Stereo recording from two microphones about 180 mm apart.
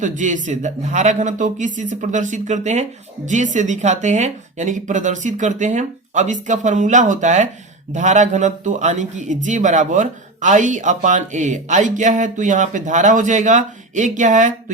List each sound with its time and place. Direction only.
0.0 s speech: 45° right (ahead or behind)